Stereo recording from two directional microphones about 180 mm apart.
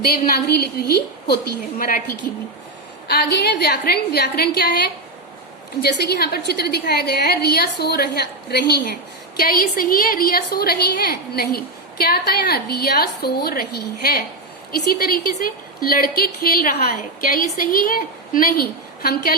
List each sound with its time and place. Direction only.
0.3 s a woman's voice: 60° left (ahead or behind)
3.1 s a woman's voice: 60° left (ahead or behind)
5.8 s a woman's voice: 65° left (ahead or behind)